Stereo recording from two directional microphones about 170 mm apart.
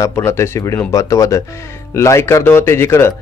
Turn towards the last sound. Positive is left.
turn(degrees=15)  # may be behind; listen again after turning